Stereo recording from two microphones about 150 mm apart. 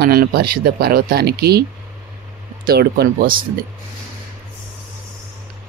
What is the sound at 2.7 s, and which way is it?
Speech, 85° right.